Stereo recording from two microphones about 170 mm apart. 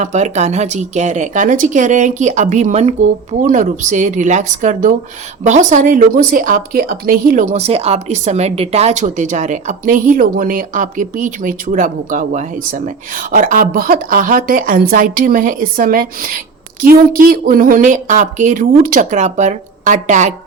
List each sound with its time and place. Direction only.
0.0 s speech: 45° right (ahead or behind)